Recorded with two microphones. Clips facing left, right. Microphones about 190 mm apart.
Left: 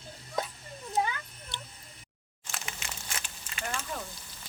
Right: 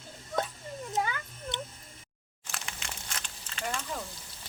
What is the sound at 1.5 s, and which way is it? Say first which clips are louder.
Cat: right 5 dB; 20° right (ahead or behind).